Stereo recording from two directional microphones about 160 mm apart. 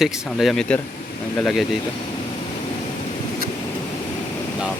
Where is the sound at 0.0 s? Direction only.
Centre (ahead or behind).